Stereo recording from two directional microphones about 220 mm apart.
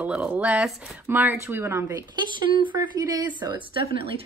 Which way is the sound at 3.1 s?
20° right (ahead or behind).